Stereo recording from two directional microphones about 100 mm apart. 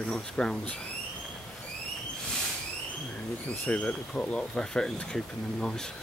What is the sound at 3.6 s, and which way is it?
Speech, 15° left (ahead or behind).